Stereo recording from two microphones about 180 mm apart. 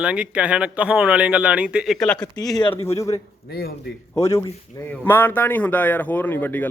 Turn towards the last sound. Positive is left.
turn(degrees=10)  # may be behind; listen again after turning